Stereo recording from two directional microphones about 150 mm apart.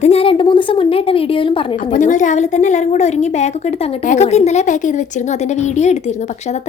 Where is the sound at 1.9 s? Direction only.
55° left (ahead or behind).